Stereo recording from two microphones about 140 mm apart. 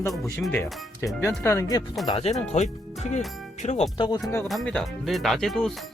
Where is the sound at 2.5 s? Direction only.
60° left (ahead or behind).